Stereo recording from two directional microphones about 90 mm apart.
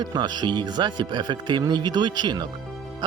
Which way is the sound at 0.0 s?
50° right (ahead or behind).